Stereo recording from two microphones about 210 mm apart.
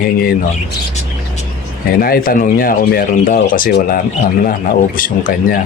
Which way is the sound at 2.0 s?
45° left (ahead or behind).